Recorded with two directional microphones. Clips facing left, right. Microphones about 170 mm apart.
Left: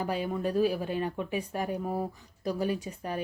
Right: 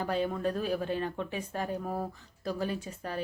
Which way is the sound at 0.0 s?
10° left (ahead or behind).